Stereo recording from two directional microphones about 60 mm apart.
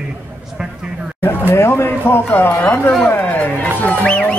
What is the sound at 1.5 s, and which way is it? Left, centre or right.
Speech, left.